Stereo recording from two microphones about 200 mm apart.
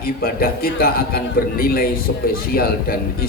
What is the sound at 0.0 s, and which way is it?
A man's voice, 50° left (ahead or behind).